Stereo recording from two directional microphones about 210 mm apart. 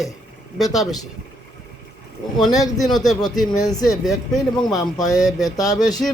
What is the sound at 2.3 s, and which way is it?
Speech, centre (ahead or behind).